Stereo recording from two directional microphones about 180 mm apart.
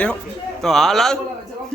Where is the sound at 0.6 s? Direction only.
Centre (ahead or behind).